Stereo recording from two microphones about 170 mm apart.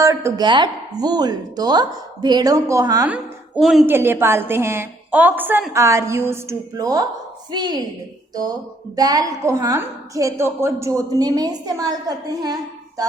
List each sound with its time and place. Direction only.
0.0 s a woman's voice: 15° right (ahead or behind)
3.1 s a woman's voice: 5° right (ahead or behind)
3.8 s a woman's voice: 15° right (ahead or behind)
9.0 s a woman's voice: 20° right (ahead or behind)